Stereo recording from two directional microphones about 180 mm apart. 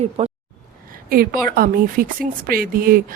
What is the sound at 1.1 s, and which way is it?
A woman's voice, 55° right (ahead or behind).